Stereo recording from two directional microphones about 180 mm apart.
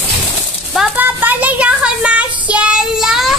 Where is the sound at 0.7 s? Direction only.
5° right (ahead or behind).